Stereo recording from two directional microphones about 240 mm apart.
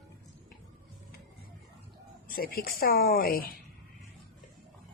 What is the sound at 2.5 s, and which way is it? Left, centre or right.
Speech, left.